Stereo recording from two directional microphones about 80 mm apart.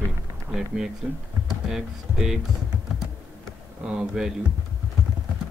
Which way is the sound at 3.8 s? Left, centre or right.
Centre.